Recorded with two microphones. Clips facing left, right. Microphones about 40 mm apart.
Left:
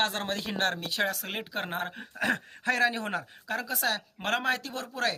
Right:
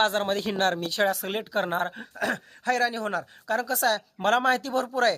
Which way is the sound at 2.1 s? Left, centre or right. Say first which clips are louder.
Left 1 dB; left.